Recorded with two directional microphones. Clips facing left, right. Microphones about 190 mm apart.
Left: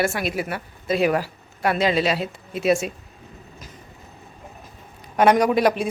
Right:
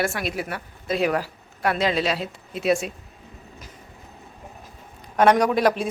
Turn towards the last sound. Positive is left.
turn(degrees=0)  # may be behind; listen again after turning